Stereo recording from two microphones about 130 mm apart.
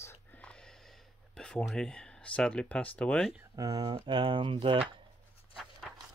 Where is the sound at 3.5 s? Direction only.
30° right (ahead or behind).